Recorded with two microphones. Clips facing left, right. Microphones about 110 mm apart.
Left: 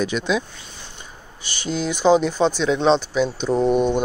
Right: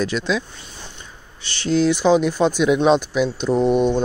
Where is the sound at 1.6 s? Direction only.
Centre (ahead or behind).